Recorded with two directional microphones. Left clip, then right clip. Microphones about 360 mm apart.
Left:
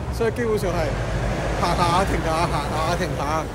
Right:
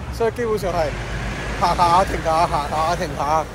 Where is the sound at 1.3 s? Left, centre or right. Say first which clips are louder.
Left 3 dB; left.